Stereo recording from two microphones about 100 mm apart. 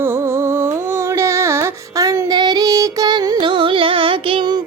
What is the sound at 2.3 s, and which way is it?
Music, 45° right (ahead or behind).